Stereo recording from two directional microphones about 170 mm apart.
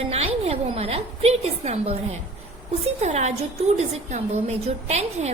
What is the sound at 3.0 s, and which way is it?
A woman's voice, 40° right (ahead or behind).